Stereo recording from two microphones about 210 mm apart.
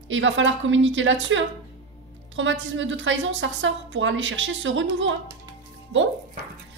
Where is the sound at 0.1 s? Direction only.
65° right (ahead or behind).